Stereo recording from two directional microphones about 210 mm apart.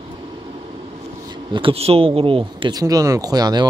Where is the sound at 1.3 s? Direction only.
25° right (ahead or behind).